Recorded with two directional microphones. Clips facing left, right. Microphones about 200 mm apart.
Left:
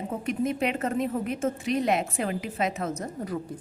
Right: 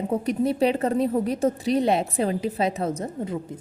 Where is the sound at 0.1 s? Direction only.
35° right (ahead or behind).